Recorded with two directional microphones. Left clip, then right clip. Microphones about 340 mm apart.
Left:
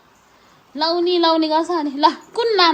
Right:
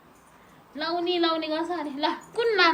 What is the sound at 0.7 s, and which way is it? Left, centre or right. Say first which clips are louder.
A woman's voice: left 9 dB; centre.